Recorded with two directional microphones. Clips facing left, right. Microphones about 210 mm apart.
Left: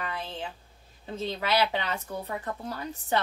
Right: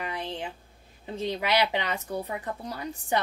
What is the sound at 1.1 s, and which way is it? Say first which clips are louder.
Speech: right 1 dB; 15° right (ahead or behind).